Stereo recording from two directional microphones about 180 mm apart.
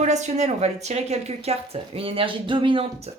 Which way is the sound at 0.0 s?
40° right (ahead or behind).